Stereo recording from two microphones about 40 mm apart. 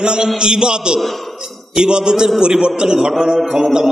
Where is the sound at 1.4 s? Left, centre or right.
Centre.